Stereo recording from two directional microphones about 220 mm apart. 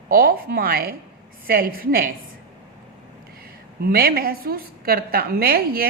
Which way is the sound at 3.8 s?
45° right (ahead or behind).